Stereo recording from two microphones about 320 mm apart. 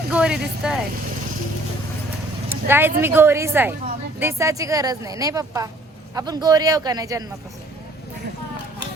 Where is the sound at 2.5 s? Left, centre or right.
Centre.